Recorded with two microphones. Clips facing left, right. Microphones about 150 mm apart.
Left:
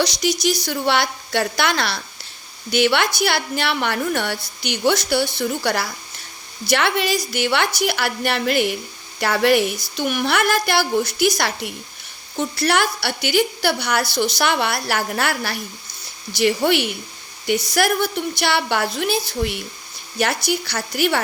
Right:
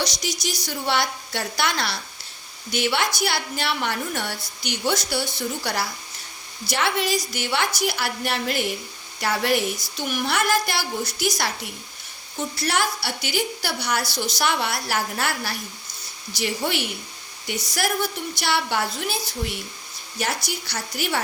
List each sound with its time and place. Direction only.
0.0 s a woman's voice: 70° left (ahead or behind)